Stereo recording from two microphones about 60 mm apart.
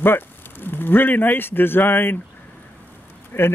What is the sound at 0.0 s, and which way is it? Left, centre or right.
Speech, left.